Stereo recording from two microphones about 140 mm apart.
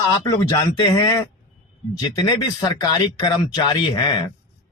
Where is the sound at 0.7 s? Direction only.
30° left (ahead or behind).